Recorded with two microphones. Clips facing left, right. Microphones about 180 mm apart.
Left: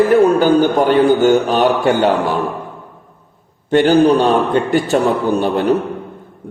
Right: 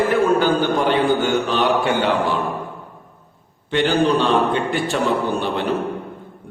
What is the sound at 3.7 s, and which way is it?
A man's voice, 45° left (ahead or behind).